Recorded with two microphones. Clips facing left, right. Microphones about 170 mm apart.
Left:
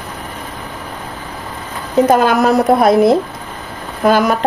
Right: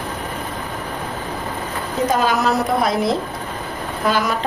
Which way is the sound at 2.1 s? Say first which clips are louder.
Left 5 dB; 55° left (ahead or behind).